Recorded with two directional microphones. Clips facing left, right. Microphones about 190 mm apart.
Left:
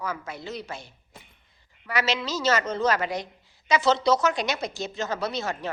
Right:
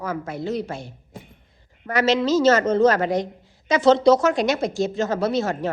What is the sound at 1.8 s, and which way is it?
A woman's voice, 50° right (ahead or behind).